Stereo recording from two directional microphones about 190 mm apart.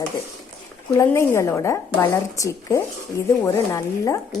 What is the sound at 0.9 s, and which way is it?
Speech, 15° left (ahead or behind).